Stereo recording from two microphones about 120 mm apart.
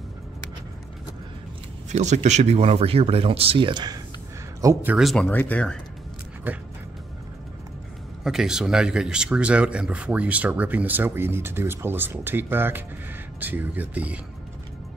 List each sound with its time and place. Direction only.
1.9 s speech: 70° right (ahead or behind); by 4.0 s 40° right (ahead or behind)
4.6 s speech: 25° right (ahead or behind)
4.9 s speech: centre (ahead or behind)
5.3 s speech: 15° left (ahead or behind)
6.5 s speech: 15° right (ahead or behind)
8.2 s speech: 5° right (ahead or behind)